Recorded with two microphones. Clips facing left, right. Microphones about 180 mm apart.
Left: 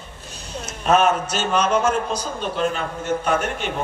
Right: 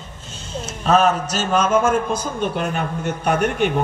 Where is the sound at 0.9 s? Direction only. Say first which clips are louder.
Right 1 dB; 35° right (ahead or behind).